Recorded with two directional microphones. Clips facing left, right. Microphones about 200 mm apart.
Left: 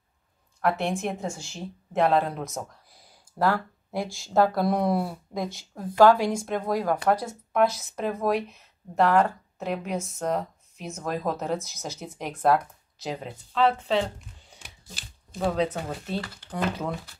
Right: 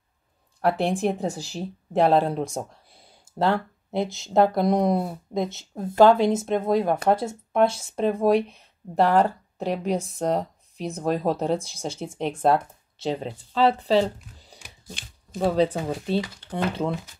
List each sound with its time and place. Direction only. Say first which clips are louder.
0.6 s speech: right 3 dB; 35° right (ahead or behind)